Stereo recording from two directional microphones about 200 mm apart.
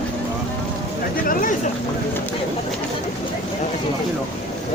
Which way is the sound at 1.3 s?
45° left (ahead or behind).